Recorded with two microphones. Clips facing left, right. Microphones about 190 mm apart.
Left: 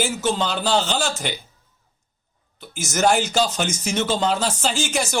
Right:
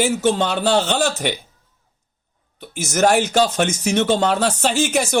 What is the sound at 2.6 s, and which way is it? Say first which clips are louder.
Speech: right 5 dB; 60° right (ahead or behind).